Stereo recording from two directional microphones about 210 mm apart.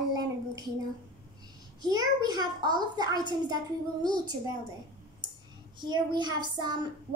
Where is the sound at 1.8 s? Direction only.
20° right (ahead or behind).